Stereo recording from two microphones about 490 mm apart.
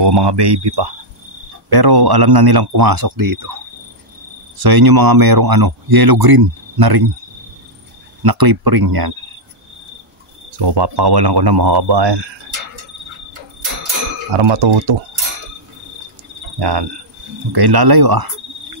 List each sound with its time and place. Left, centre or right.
0.0 s a man's voice: right
4.6 s a man's voice: right
8.2 s a man's voice: right
10.5 s a man's voice: right
14.3 s speech: right
16.5 s cricket: right
17.5 s a man's voice: right